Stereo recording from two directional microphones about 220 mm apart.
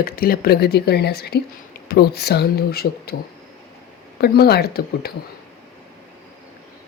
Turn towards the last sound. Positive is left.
turn(degrees=45)  # may be behind; listen again after turning